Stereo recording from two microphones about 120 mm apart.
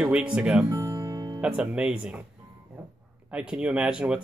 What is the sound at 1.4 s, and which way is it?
Speech, 10° right (ahead or behind).